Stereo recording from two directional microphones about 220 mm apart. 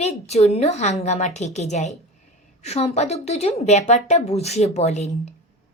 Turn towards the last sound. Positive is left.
turn(degrees=30)  # may be behind; listen again after turning